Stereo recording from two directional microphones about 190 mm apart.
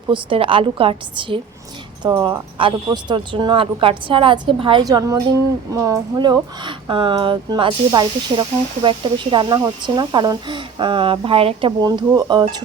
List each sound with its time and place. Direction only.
0.1 s speech: 30° right (ahead or behind)